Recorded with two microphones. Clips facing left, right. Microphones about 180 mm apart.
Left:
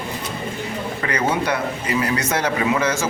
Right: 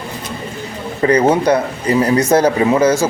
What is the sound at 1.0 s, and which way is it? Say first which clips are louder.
Speech: right 10 dB; 35° right (ahead or behind).